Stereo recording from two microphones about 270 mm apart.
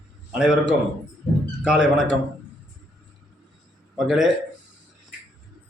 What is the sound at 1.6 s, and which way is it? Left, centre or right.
Speech, centre.